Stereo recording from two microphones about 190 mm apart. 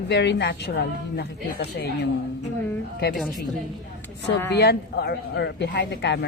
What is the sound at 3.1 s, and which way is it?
Speech, centre (ahead or behind).